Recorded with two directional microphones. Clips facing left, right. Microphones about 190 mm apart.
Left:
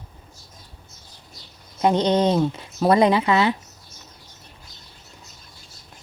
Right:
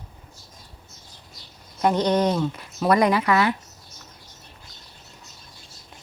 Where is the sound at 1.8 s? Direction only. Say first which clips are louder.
Left 2 dB; 20° left (ahead or behind).